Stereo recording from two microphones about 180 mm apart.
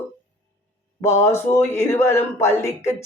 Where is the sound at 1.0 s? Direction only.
15° left (ahead or behind).